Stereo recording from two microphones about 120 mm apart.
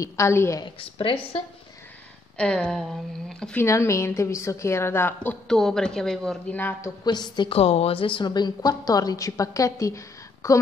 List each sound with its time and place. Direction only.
0.0 s a woman's voice: 20° left (ahead or behind)
0.7 s speech: 45° left (ahead or behind)
2.3 s speech: 10° left (ahead or behind)
3.5 s a woman's voice: 25° left (ahead or behind)
5.5 s a woman's voice: 5° left (ahead or behind)
7.1 s a woman's voice: 35° left (ahead or behind)
7.5 s a woman's voice: 55° left (ahead or behind); by 10.6 s 25° left (ahead or behind)